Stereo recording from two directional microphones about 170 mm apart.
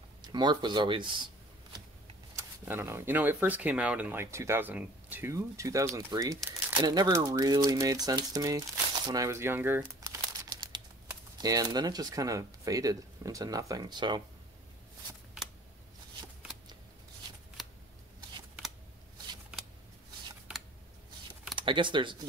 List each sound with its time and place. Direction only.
0.2 s speech: 25° right (ahead or behind)
2.3 s speech: 15° right (ahead or behind)
21.5 s speech: 30° right (ahead or behind)